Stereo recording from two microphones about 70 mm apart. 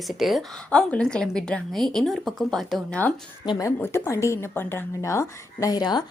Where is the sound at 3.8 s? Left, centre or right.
Left.